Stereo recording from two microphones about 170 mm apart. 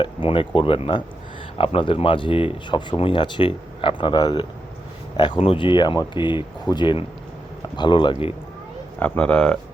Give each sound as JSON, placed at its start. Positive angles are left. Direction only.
{"t": 0.0, "sound": "speech", "side_deg": 30}
{"t": 9.0, "sound": "speech", "side_deg": 10}